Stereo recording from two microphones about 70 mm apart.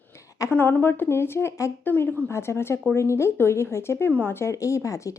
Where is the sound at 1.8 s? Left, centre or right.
Left.